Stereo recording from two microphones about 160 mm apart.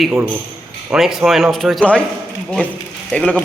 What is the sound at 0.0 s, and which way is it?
A man's voice, 5° right (ahead or behind).